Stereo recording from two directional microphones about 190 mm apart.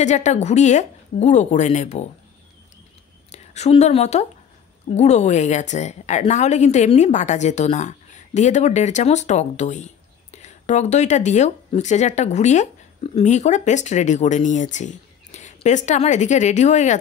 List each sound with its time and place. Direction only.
0.0 s a woman's voice: 40° left (ahead or behind)
3.3 s a woman's voice: 35° left (ahead or behind)